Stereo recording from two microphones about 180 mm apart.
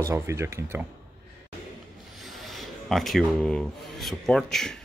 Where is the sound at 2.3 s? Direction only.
Centre (ahead or behind).